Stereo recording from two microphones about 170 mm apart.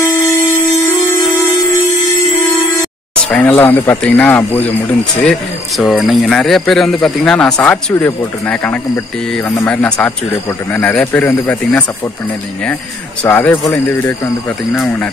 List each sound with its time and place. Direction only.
3.2 s speech: 5° left (ahead or behind)
13.2 s speech: 10° left (ahead or behind)